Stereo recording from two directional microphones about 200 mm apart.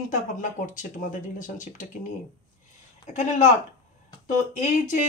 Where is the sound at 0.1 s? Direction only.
40° left (ahead or behind).